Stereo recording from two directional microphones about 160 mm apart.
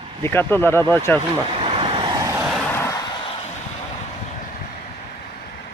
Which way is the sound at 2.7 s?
20° left (ahead or behind).